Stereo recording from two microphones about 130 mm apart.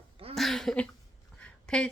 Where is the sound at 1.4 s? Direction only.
10° left (ahead or behind).